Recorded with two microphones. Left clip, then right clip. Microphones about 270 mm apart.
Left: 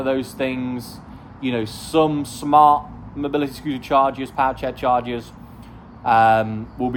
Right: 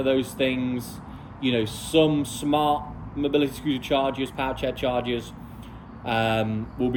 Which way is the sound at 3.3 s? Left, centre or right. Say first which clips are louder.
Even; left.